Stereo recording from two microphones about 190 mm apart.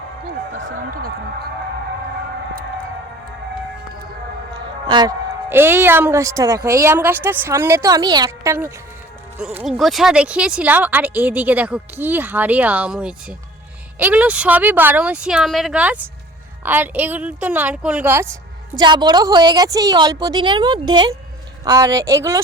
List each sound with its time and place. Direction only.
4.9 s speech: 20° right (ahead or behind)
9.4 s speech: 5° right (ahead or behind)
18.8 s a woman's voice: 25° right (ahead or behind)